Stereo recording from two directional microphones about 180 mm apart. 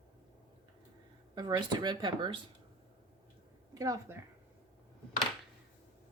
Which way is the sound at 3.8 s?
20° right (ahead or behind).